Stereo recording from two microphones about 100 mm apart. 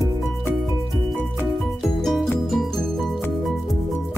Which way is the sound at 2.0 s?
Centre (ahead or behind).